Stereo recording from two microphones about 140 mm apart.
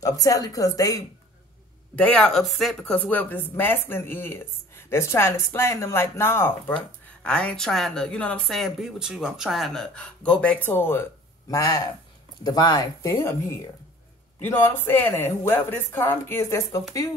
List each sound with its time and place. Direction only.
0.0 s speech: 25° left (ahead or behind)
2.0 s speech: 5° left (ahead or behind)